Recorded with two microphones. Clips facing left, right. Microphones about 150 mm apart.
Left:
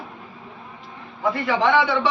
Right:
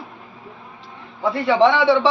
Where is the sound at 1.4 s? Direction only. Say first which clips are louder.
Right 5 dB; 30° right (ahead or behind).